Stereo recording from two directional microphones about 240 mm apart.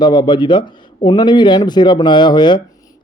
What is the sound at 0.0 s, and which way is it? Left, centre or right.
Speech, centre.